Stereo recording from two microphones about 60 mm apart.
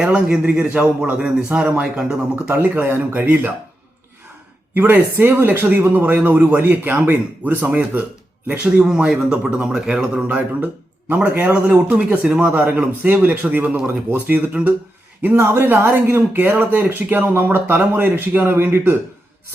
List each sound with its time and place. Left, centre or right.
0.0 s a man's voice: centre
2.3 s speech: right
4.7 s speech: right
9.0 s a man's voice: centre
15.4 s a woman's voice: right